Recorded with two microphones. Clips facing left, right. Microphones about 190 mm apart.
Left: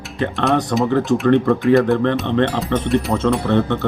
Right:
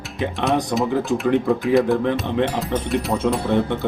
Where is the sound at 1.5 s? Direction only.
Centre (ahead or behind).